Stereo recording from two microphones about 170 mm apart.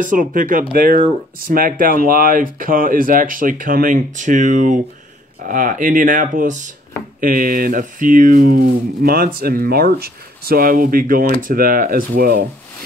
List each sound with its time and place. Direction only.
0.0 s speech: 50° right (ahead or behind)